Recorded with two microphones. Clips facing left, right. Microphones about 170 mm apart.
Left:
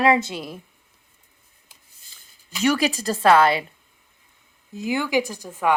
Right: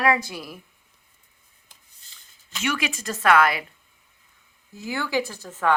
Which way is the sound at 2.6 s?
35° left (ahead or behind).